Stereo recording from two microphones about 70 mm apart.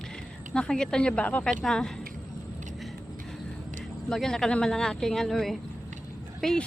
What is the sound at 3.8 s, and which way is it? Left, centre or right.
Speech, centre.